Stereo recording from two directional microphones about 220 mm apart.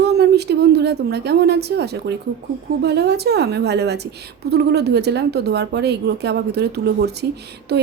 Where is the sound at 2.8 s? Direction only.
50° right (ahead or behind).